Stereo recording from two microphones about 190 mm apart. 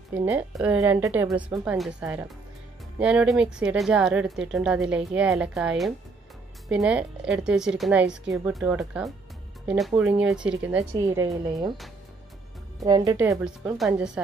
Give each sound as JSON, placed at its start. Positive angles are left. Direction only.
{"t": 0.1, "sound": "a woman's voice", "side_deg": -10}
{"t": 12.8, "sound": "speech", "side_deg": -20}
{"t": 13.4, "sound": "speech", "side_deg": -5}